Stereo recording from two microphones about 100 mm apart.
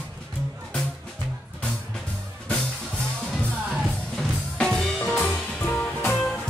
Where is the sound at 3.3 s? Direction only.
5° left (ahead or behind); by 6.2 s 20° left (ahead or behind).